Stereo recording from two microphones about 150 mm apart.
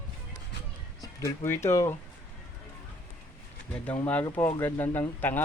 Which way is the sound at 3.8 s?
10° left (ahead or behind).